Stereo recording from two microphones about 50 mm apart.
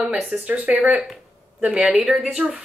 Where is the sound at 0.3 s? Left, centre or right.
Right.